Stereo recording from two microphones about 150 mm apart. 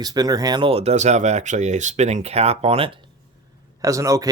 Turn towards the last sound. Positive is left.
turn(degrees=-20)  # may be behind; listen again after turning